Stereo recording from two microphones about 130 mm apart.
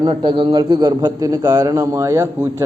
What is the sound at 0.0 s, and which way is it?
A man's voice, 35° right (ahead or behind).